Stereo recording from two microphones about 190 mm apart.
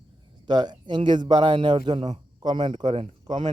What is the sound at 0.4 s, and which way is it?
A man's voice, 20° right (ahead or behind).